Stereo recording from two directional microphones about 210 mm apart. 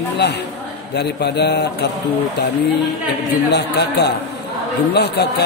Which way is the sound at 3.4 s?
55° left (ahead or behind).